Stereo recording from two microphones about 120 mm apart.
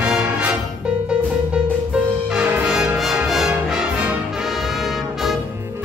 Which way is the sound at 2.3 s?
5° right (ahead or behind).